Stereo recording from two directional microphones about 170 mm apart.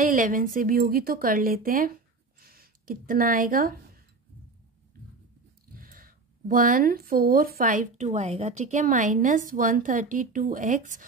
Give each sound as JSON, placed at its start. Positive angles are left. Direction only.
{"t": 0.0, "sound": "a woman's voice", "side_deg": -50}
{"t": 5.8, "sound": "speech", "side_deg": -55}